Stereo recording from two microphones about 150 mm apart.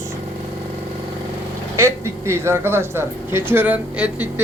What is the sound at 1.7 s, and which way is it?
A man's voice, 15° right (ahead or behind).